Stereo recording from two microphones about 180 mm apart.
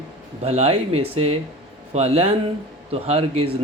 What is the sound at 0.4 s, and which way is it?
A man's voice, 35° right (ahead or behind).